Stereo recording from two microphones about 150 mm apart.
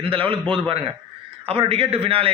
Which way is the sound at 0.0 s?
35° right (ahead or behind).